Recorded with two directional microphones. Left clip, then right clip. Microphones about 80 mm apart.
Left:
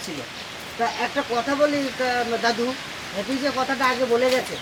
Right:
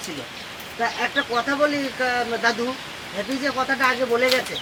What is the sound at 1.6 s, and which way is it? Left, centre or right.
Speech, centre.